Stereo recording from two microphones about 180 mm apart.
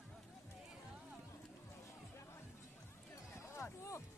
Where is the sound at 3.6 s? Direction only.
15° left (ahead or behind).